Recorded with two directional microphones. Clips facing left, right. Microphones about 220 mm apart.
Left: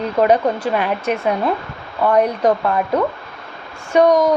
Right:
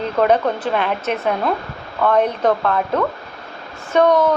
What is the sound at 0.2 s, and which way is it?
Speech, 10° left (ahead or behind).